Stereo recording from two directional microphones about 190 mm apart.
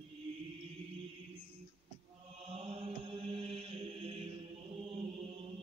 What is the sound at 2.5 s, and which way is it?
Mantra, 30° right (ahead or behind).